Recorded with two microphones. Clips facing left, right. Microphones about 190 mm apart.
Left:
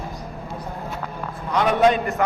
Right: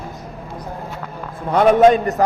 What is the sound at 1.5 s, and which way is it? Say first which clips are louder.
Speech: right 6 dB; 45° right (ahead or behind).